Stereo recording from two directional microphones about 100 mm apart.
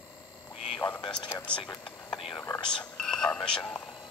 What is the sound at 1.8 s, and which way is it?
Whispering, centre (ahead or behind).